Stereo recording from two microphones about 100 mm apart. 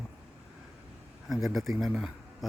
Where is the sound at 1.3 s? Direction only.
Centre (ahead or behind).